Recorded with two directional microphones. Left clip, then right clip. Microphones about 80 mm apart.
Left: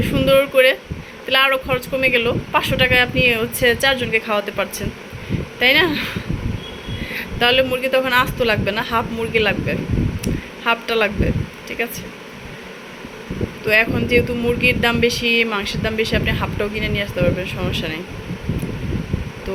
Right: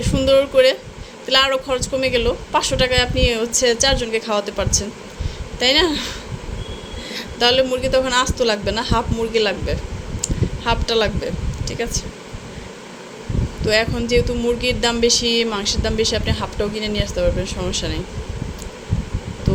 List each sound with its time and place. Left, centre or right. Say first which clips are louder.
0.0 s speech: even; right
7.1 s speech: even; right
13.7 s speech: left 2 dB; right